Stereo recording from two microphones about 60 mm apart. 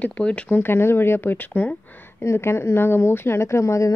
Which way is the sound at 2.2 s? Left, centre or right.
Left.